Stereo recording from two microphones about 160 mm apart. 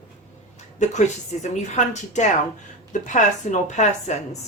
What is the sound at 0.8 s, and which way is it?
A woman's voice, 45° left (ahead or behind).